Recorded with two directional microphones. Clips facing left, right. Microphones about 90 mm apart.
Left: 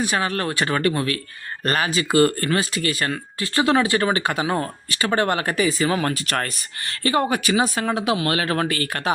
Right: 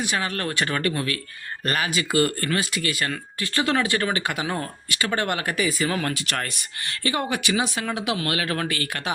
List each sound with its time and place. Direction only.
0.0 s speech: 35° left (ahead or behind)
3.4 s speech: 25° left (ahead or behind); by 9.1 s 40° left (ahead or behind)